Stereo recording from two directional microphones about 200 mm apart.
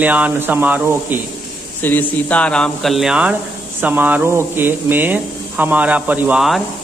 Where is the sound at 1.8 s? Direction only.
10° left (ahead or behind).